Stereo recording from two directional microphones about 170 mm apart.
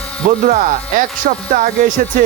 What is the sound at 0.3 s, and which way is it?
Speech, 55° right (ahead or behind).